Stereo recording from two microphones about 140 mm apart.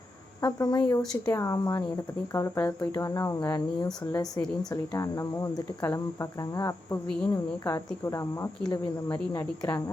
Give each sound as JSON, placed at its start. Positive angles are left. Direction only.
{"t": 0.4, "sound": "speech", "side_deg": 30}